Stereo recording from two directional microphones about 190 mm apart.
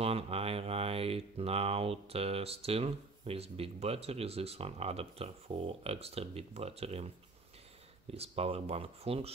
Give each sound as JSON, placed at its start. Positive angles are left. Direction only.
{"t": 0.0, "sound": "speech", "side_deg": -30}
{"t": 8.1, "sound": "speech", "side_deg": -30}